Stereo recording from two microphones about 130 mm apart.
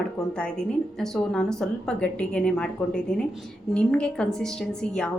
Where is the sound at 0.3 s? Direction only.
5° left (ahead or behind).